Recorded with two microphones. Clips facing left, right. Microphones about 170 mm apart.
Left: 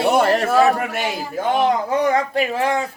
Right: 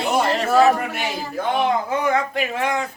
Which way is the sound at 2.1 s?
35° left (ahead or behind).